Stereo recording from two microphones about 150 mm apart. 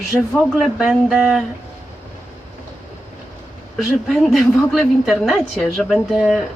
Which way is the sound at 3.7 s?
Centre (ahead or behind).